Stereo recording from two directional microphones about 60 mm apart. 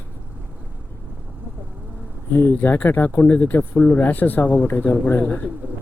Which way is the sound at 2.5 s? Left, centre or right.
Left.